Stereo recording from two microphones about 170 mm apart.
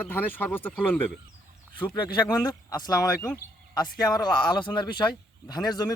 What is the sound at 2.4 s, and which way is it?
Speech, 20° left (ahead or behind).